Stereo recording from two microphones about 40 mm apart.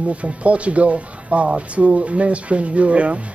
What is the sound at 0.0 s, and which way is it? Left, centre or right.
Speech, right.